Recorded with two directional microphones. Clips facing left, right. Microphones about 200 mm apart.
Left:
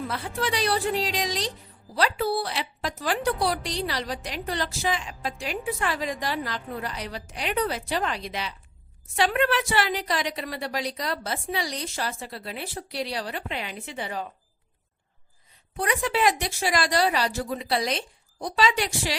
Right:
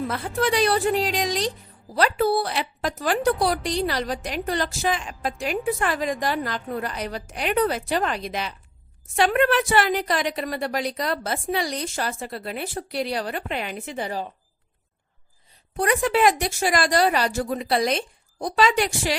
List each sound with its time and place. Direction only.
0.1 s a woman's voice: 50° right (ahead or behind)
15.7 s a woman's voice: 45° right (ahead or behind)